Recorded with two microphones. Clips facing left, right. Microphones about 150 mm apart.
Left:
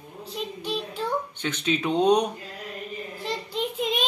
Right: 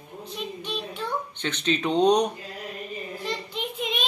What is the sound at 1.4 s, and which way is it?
Speech, 5° left (ahead or behind).